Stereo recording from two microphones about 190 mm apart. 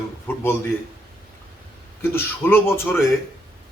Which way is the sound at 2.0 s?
10° left (ahead or behind).